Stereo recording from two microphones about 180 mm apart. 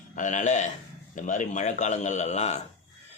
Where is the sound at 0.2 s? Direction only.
45° left (ahead or behind).